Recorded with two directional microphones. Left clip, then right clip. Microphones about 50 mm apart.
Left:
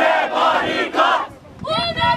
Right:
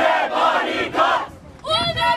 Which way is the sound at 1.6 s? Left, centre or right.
Right.